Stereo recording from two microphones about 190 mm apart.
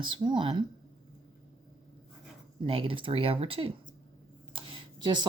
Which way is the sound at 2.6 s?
30° right (ahead or behind).